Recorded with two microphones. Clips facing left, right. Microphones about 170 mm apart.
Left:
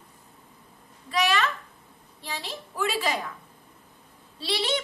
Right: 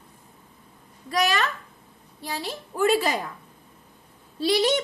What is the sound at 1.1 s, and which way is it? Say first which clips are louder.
A woman's voice: right 1 dB; 40° right (ahead or behind).